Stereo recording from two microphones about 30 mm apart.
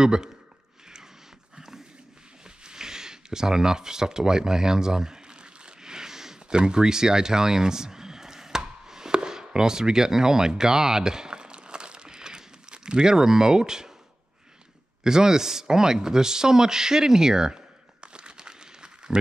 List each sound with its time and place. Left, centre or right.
0.0 s speech: right
2.4 s a sound: right
15.0 s speech: centre
18.0 s crumpling: right